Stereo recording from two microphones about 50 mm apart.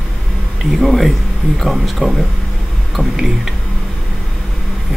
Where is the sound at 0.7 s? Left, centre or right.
Centre.